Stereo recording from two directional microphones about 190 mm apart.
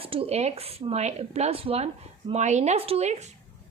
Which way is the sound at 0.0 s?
30° right (ahead or behind).